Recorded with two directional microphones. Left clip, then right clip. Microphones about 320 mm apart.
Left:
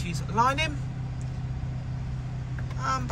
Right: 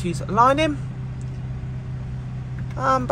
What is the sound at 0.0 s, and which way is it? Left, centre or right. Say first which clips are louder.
Speech: right 7 dB; centre.